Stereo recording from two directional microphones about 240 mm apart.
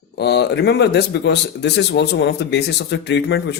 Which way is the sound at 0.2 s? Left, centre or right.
Left.